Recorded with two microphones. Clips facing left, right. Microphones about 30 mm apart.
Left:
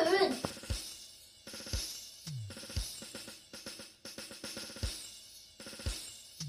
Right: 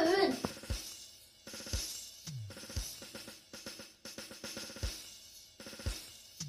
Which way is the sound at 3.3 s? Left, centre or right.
Centre.